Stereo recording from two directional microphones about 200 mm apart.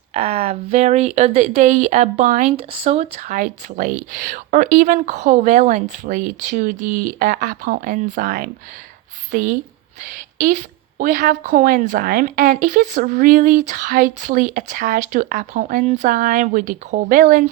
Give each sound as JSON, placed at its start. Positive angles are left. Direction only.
{"t": 0.1, "sound": "a woman's voice", "side_deg": -30}